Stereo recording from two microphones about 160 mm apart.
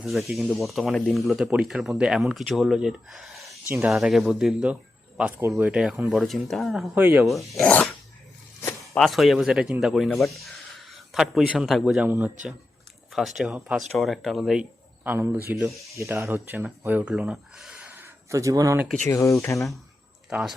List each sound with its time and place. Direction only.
0.0 s speech: centre (ahead or behind)
3.7 s speech: 15° right (ahead or behind)
3.9 s speech: centre (ahead or behind)
6.9 s speech: 10° right (ahead or behind)
7.6 s speech: 10° left (ahead or behind)
9.0 s speech: centre (ahead or behind)
12.0 s speech: 10° right (ahead or behind)
13.1 s speech: centre (ahead or behind); by 18.8 s 20° right (ahead or behind)
19.0 s speech: 20° left (ahead or behind)